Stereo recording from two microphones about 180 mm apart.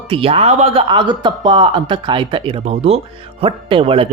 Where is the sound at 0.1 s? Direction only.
30° right (ahead or behind).